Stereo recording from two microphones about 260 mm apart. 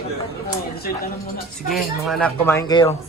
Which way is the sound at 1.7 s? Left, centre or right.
Centre.